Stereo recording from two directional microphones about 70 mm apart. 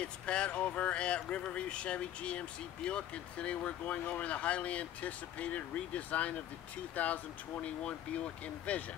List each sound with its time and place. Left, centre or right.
0.0 s speech: centre
8.7 s speech: left